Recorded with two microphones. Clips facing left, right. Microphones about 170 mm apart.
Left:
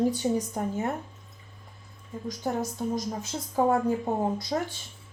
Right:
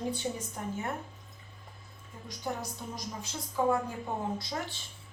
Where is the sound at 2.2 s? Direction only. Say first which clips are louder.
Left 7 dB; 45° left (ahead or behind).